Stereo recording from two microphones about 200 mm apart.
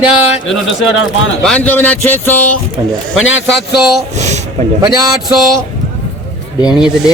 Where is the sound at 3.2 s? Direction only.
75° left (ahead or behind).